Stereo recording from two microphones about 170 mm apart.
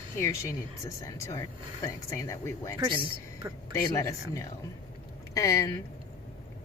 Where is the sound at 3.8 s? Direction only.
20° left (ahead or behind).